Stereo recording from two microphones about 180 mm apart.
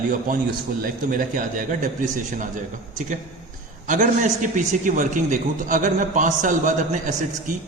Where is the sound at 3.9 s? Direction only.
45° right (ahead or behind).